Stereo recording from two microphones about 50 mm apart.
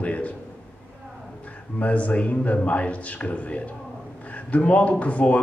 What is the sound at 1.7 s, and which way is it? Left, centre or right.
Speech, left.